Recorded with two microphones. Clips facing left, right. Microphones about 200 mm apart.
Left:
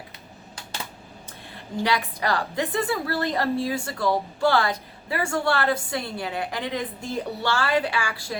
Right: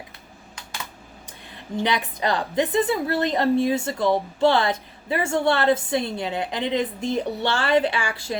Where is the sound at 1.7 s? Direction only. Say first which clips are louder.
Right 1 dB; 20° right (ahead or behind).